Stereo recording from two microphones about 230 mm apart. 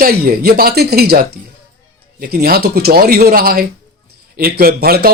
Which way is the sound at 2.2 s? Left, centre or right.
Right.